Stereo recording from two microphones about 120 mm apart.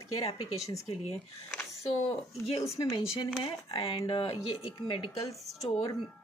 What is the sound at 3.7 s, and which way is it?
Speech, 45° left (ahead or behind).